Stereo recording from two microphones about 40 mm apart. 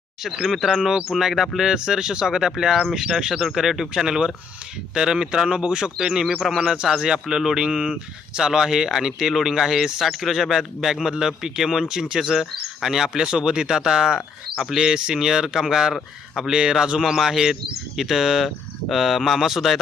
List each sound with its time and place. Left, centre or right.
0.2 s speech: centre
14.8 s speech: centre
17.0 s speech: centre